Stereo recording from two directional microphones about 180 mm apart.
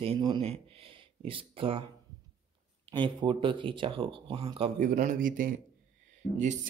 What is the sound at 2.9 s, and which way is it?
Speech, 25° right (ahead or behind).